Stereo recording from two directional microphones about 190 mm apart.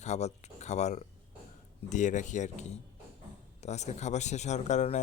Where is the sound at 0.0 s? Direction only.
35° left (ahead or behind).